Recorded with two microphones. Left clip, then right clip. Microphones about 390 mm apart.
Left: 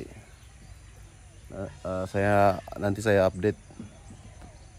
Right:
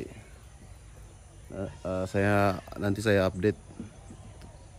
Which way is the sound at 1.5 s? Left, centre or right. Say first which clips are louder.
Even; centre.